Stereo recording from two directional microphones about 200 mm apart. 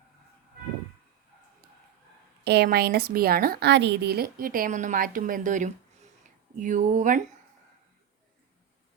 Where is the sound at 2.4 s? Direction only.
55° right (ahead or behind).